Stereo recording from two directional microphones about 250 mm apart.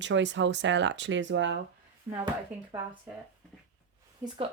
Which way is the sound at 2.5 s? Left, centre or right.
Centre.